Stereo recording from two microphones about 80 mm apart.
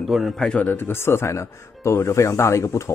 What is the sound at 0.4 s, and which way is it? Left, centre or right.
Speech, centre.